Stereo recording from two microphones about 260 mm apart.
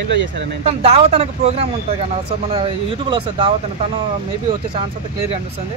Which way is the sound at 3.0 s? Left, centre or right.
Centre.